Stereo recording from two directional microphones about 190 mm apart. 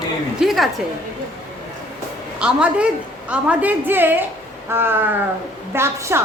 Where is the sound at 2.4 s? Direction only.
5° right (ahead or behind).